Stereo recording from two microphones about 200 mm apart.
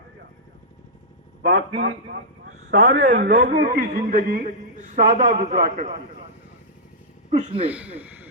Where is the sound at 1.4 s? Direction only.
80° right.